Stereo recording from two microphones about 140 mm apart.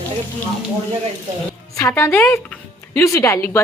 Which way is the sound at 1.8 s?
15° left (ahead or behind).